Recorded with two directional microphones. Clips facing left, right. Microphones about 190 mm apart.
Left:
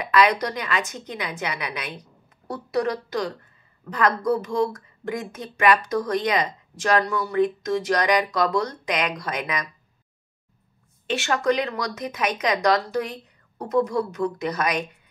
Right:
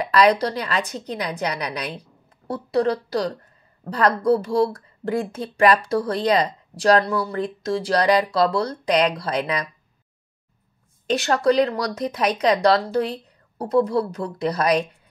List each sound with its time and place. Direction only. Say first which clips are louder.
0.0 s a woman's voice: right 3 dB; 35° right (ahead or behind)
11.1 s speech: right 4 dB; 35° right (ahead or behind)